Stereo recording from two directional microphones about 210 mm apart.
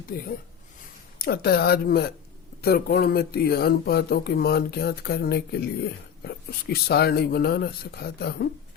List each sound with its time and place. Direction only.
0.1 s speech: 45° left (ahead or behind)